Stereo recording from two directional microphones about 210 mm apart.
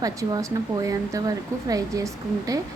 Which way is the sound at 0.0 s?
15° right (ahead or behind).